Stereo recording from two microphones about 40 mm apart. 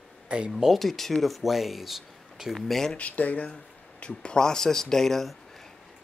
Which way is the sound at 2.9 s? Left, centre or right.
Left.